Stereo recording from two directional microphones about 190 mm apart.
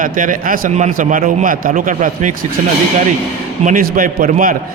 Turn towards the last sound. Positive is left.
turn(degrees=-45)  # may be behind; listen again after turning